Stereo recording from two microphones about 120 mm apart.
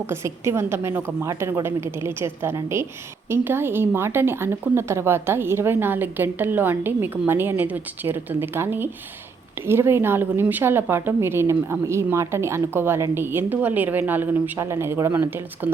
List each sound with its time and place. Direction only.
0.1 s a woman's voice: 25° right (ahead or behind)